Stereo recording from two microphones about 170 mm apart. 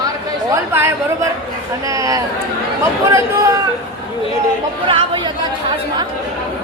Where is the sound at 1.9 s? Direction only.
20° right (ahead or behind).